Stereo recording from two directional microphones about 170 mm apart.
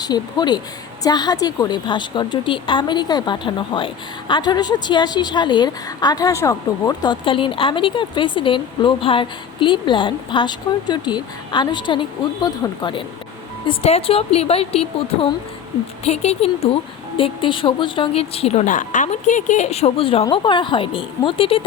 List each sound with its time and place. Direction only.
0.0 s a woman's voice: 25° left (ahead or behind)